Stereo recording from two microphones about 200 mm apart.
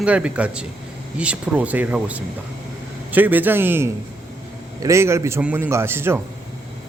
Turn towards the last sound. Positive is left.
turn(degrees=-10)  # may be behind; listen again after turning